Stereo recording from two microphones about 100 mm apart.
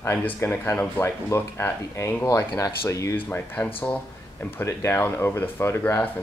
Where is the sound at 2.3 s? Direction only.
35° left (ahead or behind).